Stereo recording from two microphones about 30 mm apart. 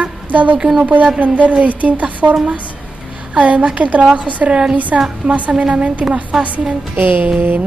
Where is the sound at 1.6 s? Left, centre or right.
Right.